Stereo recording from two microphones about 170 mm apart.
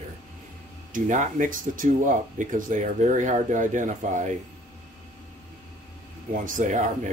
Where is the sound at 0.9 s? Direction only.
50° right (ahead or behind).